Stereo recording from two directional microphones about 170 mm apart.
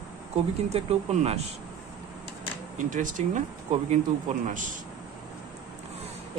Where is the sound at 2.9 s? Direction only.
50° right (ahead or behind).